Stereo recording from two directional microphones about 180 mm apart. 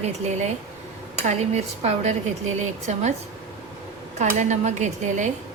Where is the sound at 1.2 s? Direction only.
40° right (ahead or behind).